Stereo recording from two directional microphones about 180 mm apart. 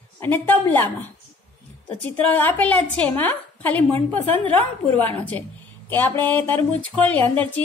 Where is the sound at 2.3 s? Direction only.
10° left (ahead or behind).